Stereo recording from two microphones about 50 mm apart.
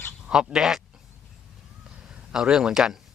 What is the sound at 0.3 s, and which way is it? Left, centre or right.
Speech, centre.